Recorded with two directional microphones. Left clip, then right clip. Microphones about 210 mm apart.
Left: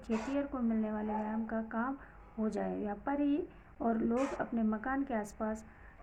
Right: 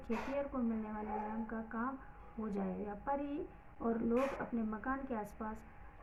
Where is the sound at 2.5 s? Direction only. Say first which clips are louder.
Left 2 dB; 50° left (ahead or behind).